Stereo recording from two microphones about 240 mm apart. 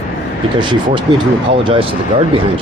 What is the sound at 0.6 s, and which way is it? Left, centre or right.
Speech, centre.